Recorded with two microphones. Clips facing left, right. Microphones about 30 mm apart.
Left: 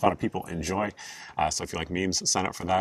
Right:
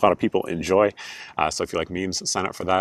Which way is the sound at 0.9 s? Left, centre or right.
Right.